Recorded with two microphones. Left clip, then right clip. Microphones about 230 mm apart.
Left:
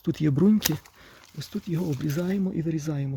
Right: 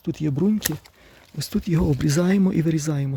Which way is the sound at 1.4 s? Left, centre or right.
Right.